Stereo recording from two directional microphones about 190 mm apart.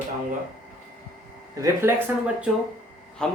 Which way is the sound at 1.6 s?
10° right (ahead or behind).